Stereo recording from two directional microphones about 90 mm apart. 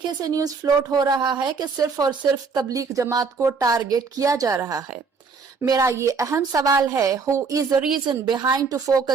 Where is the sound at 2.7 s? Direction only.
40° right (ahead or behind).